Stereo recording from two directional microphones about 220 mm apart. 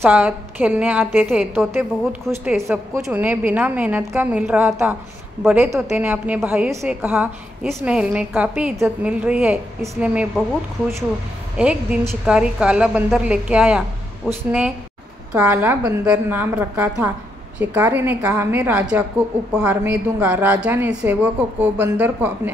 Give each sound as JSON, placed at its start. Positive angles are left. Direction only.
{"t": 0.0, "sound": "a woman's voice", "side_deg": -10}
{"t": 11.5, "sound": "a woman's voice", "side_deg": -5}